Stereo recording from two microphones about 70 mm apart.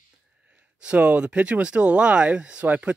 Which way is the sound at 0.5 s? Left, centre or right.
Centre.